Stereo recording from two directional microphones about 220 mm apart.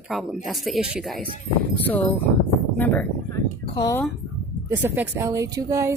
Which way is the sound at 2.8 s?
5° left (ahead or behind).